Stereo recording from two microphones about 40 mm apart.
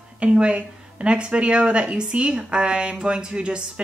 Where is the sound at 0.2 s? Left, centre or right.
Right.